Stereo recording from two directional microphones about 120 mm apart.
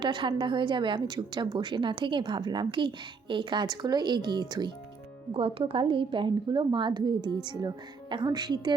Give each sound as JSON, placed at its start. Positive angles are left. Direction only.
{"t": 0.0, "sound": "a woman's voice", "side_deg": -40}
{"t": 5.3, "sound": "a woman's voice", "side_deg": -50}